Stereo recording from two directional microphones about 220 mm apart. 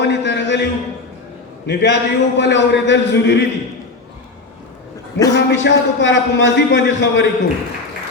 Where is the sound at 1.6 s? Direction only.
50° left (ahead or behind).